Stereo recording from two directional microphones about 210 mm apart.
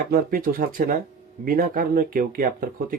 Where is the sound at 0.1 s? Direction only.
45° right (ahead or behind).